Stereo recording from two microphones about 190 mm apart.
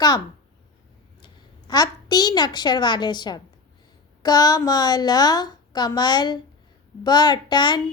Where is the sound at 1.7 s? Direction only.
20° left (ahead or behind).